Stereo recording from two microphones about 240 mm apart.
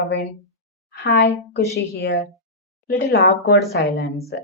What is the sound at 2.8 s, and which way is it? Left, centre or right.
A woman's voice, left.